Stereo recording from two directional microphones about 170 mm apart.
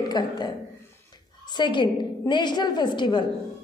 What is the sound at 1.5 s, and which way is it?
A woman's voice, 25° left (ahead or behind).